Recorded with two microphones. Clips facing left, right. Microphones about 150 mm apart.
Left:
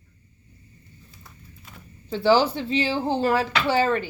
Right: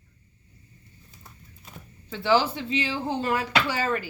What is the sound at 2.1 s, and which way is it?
Speech, 35° left (ahead or behind).